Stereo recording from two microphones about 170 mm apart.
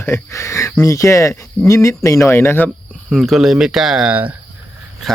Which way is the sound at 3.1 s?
Centre (ahead or behind).